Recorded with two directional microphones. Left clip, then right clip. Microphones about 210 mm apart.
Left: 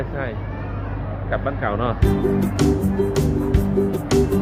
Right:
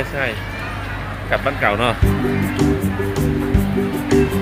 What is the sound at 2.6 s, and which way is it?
Music, centre (ahead or behind).